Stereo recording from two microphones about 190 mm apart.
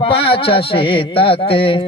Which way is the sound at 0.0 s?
30° left (ahead or behind).